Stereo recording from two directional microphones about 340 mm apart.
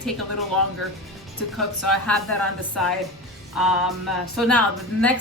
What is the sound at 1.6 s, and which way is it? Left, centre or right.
Speech, centre.